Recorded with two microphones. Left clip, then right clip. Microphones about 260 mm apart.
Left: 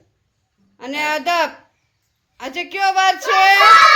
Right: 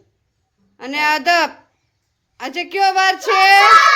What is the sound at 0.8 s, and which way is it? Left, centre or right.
A woman's voice, centre.